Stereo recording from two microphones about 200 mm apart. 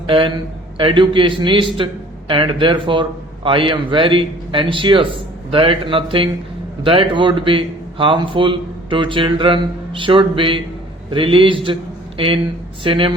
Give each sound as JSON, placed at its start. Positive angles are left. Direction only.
{"t": 0.1, "sound": "a man's voice", "side_deg": -25}